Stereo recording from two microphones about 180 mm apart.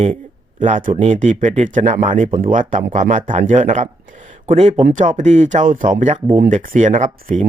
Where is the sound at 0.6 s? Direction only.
45° right (ahead or behind).